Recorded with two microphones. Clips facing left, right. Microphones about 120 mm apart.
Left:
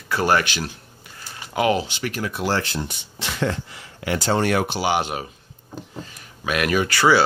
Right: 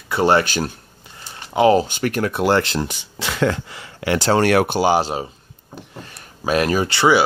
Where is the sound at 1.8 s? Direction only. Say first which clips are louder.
Right 6 dB; 45° right (ahead or behind); by 4.6 s 75° right (ahead or behind).